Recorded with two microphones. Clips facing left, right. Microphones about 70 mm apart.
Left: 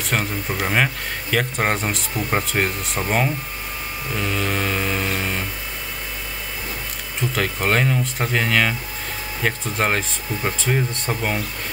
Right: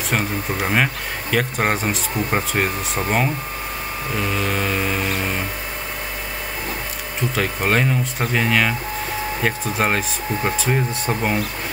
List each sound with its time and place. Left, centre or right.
0.1 s speech: centre
4.2 s a sound: centre
7.3 s speech: centre